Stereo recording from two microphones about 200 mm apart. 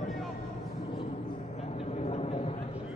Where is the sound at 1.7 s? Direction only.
30° left (ahead or behind).